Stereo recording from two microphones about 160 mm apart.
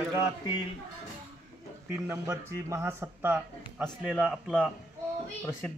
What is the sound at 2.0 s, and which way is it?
A man's voice, 20° right (ahead or behind).